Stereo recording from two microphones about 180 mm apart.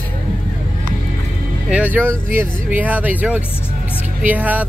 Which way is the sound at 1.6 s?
5° right (ahead or behind).